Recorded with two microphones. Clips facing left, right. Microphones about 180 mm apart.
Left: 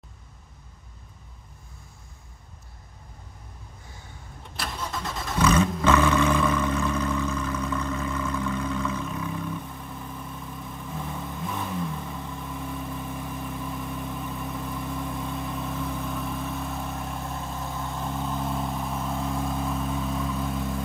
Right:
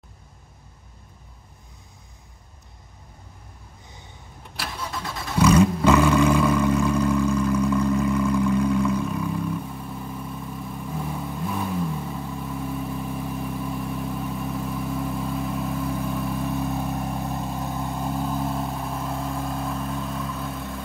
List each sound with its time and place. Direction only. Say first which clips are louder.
3.8 s vehicle: right 2 dB; 20° right (ahead or behind)
4.6 s vehicle: right 1 dB; centre (ahead or behind)
16.4 s vehicle: right 6 dB; 15° right (ahead or behind)
17.9 s vehicle: right 3 dB; 5° right (ahead or behind)